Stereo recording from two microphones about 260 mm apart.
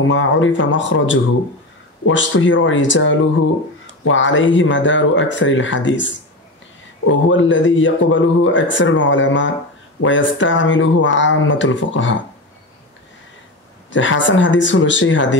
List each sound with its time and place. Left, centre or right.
0.0 s speech: left
13.9 s speech: left